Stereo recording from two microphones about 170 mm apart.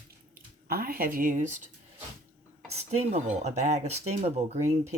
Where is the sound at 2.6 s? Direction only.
40° right (ahead or behind).